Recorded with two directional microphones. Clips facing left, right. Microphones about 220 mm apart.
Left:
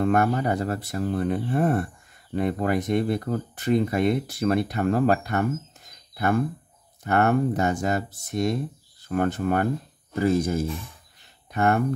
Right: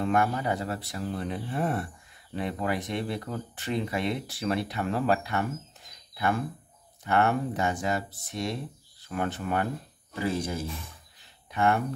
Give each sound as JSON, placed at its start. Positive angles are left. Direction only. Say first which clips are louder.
{"t": 0.0, "sound": "speech", "louder": "left 5 dB", "side_deg": 45}